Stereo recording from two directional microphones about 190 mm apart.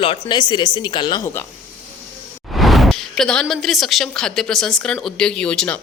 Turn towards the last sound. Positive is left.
turn(degrees=5)  # may be behind; listen again after turning